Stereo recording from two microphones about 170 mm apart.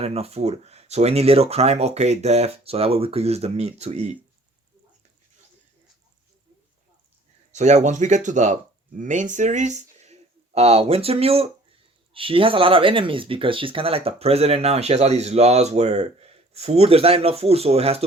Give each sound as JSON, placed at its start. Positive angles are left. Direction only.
{"t": 0.0, "sound": "speech", "side_deg": -35}
{"t": 7.5, "sound": "speech", "side_deg": -45}